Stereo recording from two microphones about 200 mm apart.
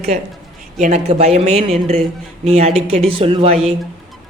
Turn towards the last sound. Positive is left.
turn(degrees=-30)  # may be behind; listen again after turning